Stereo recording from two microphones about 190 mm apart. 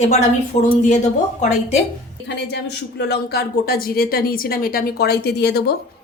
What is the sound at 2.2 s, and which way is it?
Speech, 65° left (ahead or behind).